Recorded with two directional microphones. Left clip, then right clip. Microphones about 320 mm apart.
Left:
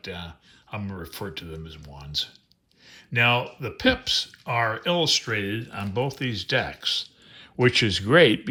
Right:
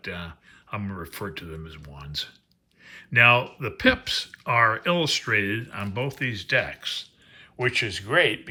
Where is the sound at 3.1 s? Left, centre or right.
Centre.